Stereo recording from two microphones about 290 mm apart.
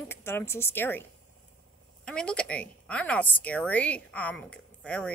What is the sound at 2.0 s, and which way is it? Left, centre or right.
A woman's voice, centre.